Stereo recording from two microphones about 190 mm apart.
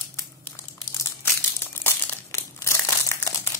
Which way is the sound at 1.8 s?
15° left (ahead or behind).